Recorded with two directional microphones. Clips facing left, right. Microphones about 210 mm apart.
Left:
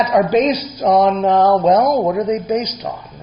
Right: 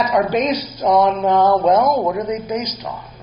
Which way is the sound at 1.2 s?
Centre (ahead or behind).